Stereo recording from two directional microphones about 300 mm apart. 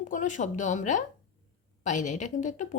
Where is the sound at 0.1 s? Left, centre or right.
Left.